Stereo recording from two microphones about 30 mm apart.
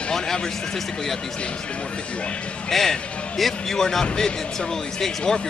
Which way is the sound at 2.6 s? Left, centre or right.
Centre.